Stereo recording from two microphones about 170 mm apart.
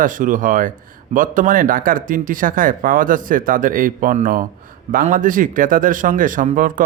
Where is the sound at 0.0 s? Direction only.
50° right (ahead or behind).